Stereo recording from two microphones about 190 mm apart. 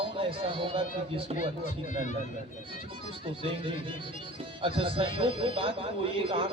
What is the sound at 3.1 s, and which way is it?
Speech, 30° right (ahead or behind).